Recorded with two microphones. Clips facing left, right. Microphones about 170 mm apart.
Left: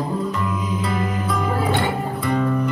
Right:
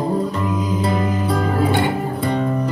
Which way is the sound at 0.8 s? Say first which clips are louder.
Right 4 dB; 35° right (ahead or behind).